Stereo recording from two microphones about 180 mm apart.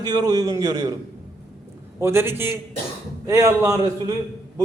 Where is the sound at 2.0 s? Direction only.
15° right (ahead or behind).